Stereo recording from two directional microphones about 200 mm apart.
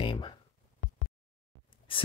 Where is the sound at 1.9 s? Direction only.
25° left (ahead or behind).